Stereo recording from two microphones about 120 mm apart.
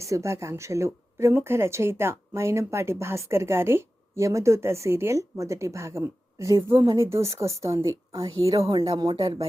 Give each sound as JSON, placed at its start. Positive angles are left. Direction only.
{"t": 0.0, "sound": "speech", "side_deg": -25}